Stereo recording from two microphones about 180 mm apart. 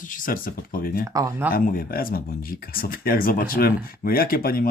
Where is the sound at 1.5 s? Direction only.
50° left (ahead or behind).